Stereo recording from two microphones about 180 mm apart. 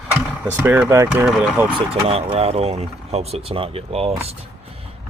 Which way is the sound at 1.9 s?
35° right (ahead or behind).